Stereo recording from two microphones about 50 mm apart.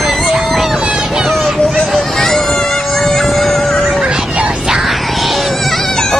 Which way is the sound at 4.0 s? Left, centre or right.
Centre.